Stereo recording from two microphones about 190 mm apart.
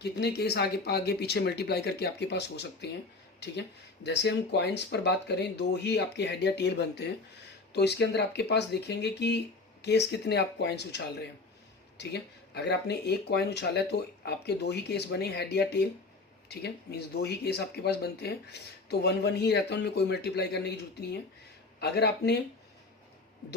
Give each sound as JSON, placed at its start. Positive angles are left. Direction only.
{"t": 0.0, "sound": "speech", "side_deg": 60}
{"t": 4.0, "sound": "speech", "side_deg": 65}
{"t": 21.8, "sound": "speech", "side_deg": 60}